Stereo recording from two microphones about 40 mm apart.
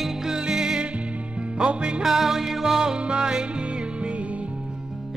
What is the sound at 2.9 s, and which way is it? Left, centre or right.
Music, right.